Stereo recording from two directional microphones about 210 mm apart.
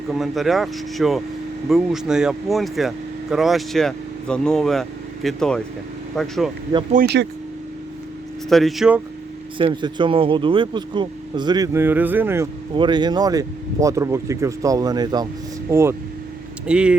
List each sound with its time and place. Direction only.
0.1 s speech: centre (ahead or behind)
6.9 s speech: 50° right (ahead or behind)
8.4 s speech: centre (ahead or behind)
9.6 s speech: 25° right (ahead or behind)
12.7 s speech: 20° right (ahead or behind); by 16.9 s 5° right (ahead or behind)